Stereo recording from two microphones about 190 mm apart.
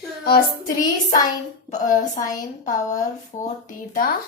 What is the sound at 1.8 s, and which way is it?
A woman's voice, 45° left (ahead or behind).